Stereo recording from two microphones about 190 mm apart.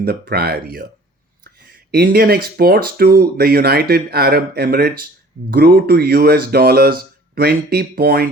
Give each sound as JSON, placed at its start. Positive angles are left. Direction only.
{"t": 0.0, "sound": "speech", "side_deg": -55}